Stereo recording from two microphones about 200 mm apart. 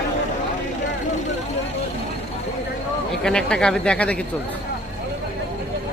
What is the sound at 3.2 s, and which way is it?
Speech, 5° left (ahead or behind).